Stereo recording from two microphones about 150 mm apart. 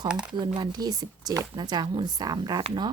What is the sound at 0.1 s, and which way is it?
Speech, 5° right (ahead or behind).